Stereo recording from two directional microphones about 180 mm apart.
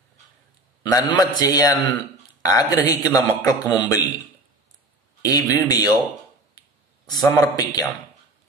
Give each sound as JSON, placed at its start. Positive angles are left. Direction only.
{"t": 0.9, "sound": "a man's voice", "side_deg": 25}
{"t": 5.2, "sound": "a man's voice", "side_deg": 20}
{"t": 7.1, "sound": "a man's voice", "side_deg": 20}